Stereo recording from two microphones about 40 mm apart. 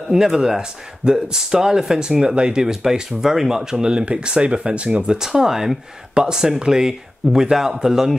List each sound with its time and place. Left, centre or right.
0.4 s speech: centre
2.2 s speech: right
5.0 s speech: centre